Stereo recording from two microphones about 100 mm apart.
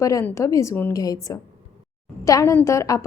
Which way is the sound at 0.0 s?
30° left (ahead or behind).